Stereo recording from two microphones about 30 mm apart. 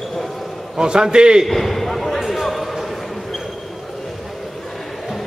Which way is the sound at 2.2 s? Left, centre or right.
Centre.